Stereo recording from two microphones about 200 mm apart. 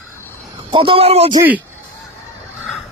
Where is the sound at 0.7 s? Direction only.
25° right (ahead or behind).